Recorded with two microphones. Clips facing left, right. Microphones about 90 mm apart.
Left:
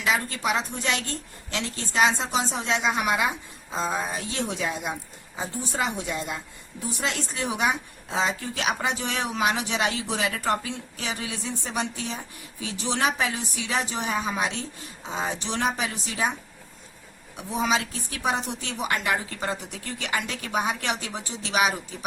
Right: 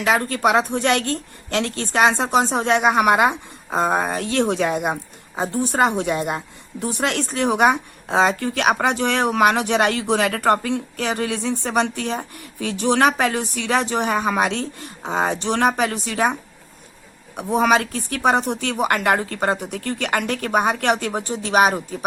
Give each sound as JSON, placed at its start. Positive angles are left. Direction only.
{"t": 0.0, "sound": "a woman's voice", "side_deg": -55}